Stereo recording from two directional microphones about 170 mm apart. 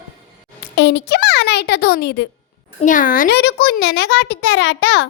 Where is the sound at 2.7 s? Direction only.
50° left (ahead or behind); by 5.0 s 90° left.